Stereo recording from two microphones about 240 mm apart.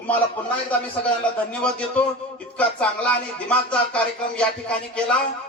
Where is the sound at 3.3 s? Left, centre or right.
Centre.